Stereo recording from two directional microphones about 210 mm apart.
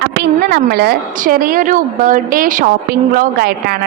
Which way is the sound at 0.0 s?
50° right (ahead or behind).